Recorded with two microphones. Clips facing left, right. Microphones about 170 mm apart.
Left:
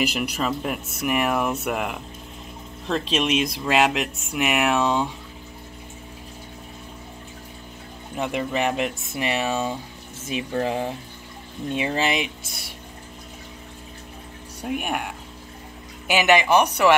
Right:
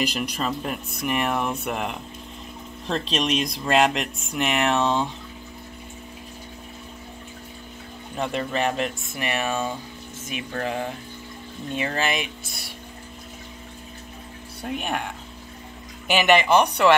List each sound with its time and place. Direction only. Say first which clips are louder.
0.0 s speech: left 2 dB; 5° left (ahead or behind)
8.2 s speech: left 1 dB; 10° left (ahead or behind)
14.6 s speech: left 1 dB; 10° left (ahead or behind)